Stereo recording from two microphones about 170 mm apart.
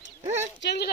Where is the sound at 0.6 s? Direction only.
80° left.